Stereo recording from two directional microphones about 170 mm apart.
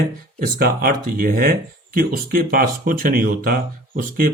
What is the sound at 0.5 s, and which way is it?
Speech, 60° right (ahead or behind).